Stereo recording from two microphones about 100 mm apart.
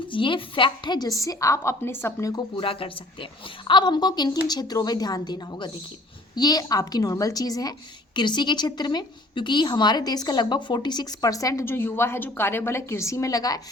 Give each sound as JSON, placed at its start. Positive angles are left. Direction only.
{"t": 0.1, "sound": "a woman's voice", "side_deg": 55}
{"t": 1.2, "sound": "a woman's voice", "side_deg": 35}
{"t": 2.6, "sound": "a woman's voice", "side_deg": 65}
{"t": 3.7, "sound": "a woman's voice", "side_deg": 50}
{"t": 8.1, "sound": "a woman's voice", "side_deg": 50}
{"t": 11.6, "sound": "a woman's voice", "side_deg": 20}